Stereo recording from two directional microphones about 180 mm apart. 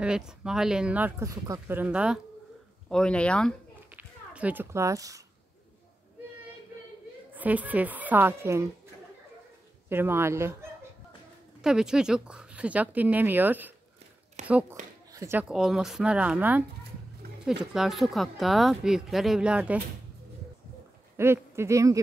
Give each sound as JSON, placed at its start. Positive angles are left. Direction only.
{"t": 0.0, "sound": "speech", "side_deg": -5}
{"t": 2.9, "sound": "speech", "side_deg": 5}
{"t": 3.9, "sound": "a sound", "side_deg": -10}
{"t": 7.3, "sound": "speech", "side_deg": -10}
{"t": 9.8, "sound": "speech", "side_deg": -10}
{"t": 11.6, "sound": "speech", "side_deg": -5}
{"t": 17.7, "sound": "speech", "side_deg": 0}
{"t": 21.2, "sound": "speech", "side_deg": -15}